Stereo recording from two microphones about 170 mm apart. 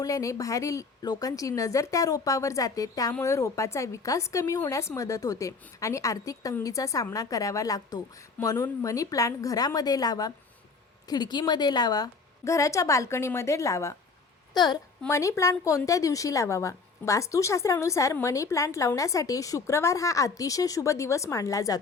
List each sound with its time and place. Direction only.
0.0 s a woman's voice: 20° left (ahead or behind)